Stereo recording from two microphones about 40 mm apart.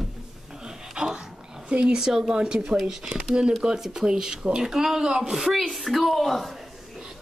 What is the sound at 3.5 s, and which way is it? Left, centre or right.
Speech, centre.